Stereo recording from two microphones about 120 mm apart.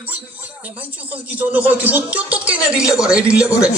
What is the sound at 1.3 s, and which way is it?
Speech, 15° right (ahead or behind).